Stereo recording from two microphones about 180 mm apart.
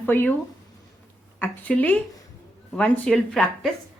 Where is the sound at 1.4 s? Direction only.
10° left (ahead or behind).